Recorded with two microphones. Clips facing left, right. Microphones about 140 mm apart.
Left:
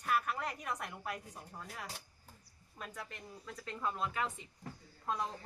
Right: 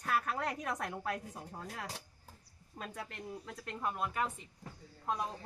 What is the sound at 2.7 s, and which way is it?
Speech, 30° right (ahead or behind).